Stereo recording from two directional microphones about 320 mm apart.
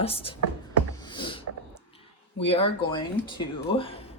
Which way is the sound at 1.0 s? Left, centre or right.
Centre.